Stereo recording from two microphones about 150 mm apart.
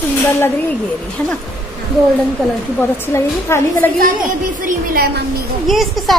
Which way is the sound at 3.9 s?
65° right (ahead or behind).